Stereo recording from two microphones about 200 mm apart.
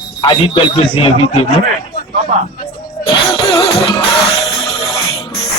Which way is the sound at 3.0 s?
25° left (ahead or behind).